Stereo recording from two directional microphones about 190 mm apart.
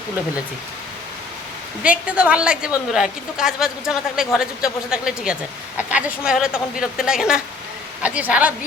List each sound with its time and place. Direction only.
1.8 s a woman's voice: 5° right (ahead or behind)